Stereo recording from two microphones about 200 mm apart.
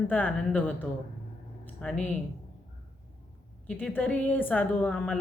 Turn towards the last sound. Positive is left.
turn(degrees=5)  # may be behind; listen again after turning